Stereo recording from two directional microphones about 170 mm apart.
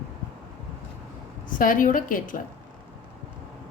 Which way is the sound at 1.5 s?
50° left (ahead or behind).